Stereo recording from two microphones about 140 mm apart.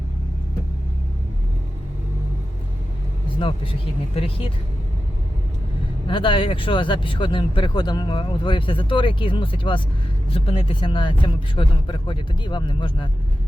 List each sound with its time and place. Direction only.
3.2 s speech: 35° left (ahead or behind)
6.1 s speech: 35° left (ahead or behind)